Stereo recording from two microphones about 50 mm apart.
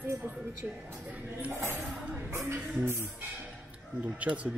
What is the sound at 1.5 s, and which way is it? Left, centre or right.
Speech, right.